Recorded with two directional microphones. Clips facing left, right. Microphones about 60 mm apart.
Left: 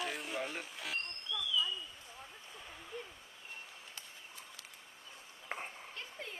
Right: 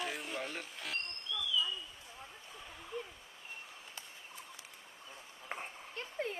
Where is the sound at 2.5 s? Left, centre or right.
Centre.